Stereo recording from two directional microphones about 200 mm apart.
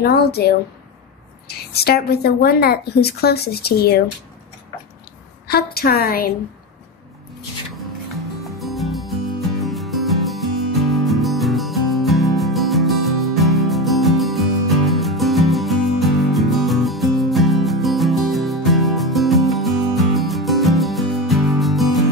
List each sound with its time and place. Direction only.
0.0 s a woman's voice: 50° left (ahead or behind)
1.7 s a woman's voice: 50° left (ahead or behind)
5.5 s a woman's voice: 50° left (ahead or behind)
8.5 s music: centre (ahead or behind)